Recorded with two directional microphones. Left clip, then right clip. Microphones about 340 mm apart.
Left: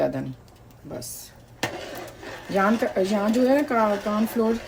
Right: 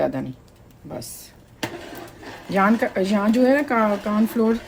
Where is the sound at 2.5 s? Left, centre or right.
Right.